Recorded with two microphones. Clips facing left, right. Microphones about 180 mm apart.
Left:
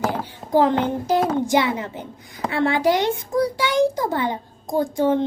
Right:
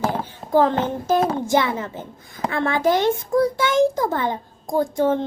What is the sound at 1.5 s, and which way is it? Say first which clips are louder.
Child singing: even; 15° left (ahead or behind).